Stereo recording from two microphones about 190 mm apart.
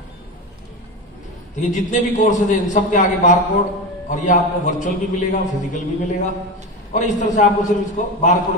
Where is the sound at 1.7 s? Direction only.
40° left (ahead or behind).